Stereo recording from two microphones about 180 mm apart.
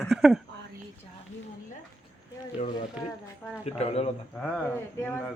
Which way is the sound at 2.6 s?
35° left (ahead or behind).